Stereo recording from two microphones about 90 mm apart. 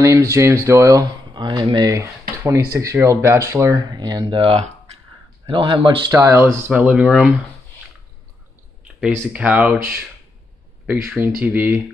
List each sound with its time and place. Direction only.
0.0 s speech: 35° right (ahead or behind)
1.3 s speech: 55° right (ahead or behind)
1.9 s speech: 35° right (ahead or behind)
3.7 s speech: 50° right (ahead or behind)
5.5 s speech: 75° right (ahead or behind)
6.0 s speech: 40° right (ahead or behind)
6.7 s speech: 15° right (ahead or behind)
9.3 s speech: 15° right (ahead or behind)